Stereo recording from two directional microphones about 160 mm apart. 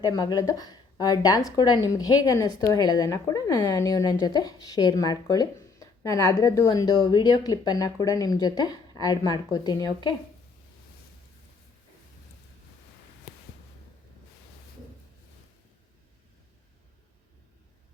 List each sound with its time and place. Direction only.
0.0 s a woman's voice: 25° left (ahead or behind)